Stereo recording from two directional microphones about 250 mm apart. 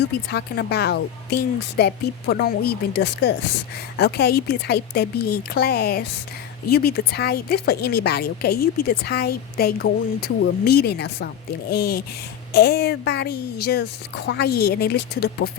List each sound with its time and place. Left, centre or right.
0.3 s speech: left